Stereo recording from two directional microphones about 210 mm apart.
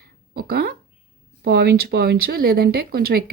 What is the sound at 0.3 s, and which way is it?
Speech, 45° right (ahead or behind).